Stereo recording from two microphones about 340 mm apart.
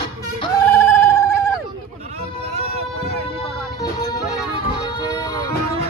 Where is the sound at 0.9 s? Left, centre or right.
Centre.